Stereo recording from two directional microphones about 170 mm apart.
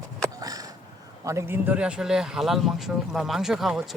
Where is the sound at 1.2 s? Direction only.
15° right (ahead or behind).